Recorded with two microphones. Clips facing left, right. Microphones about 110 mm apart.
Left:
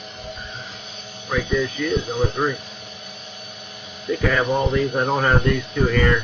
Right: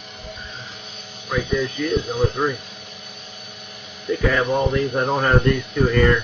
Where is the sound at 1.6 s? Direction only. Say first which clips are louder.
Even; centre (ahead or behind).